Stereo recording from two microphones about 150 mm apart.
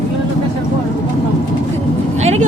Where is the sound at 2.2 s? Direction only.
45° right (ahead or behind).